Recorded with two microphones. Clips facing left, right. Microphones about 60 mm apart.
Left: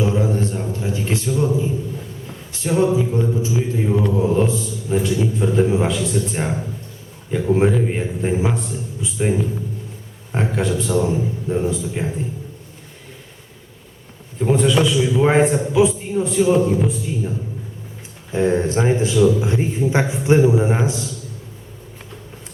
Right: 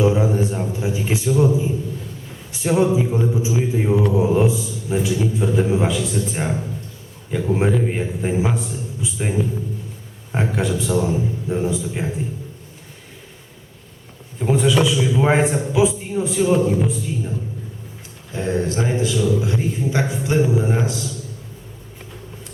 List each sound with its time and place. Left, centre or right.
0.0 s a sound: centre
2.5 s a man's voice: centre
14.3 s a man's voice: centre
18.3 s a man's voice: left